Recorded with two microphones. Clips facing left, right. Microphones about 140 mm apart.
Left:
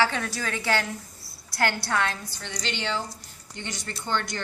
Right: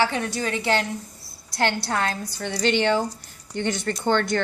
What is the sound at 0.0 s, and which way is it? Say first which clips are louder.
A woman's voice: right 2 dB; 20° right (ahead or behind).